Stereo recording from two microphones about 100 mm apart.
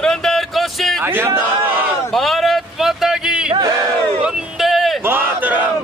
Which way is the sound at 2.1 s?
Centre (ahead or behind).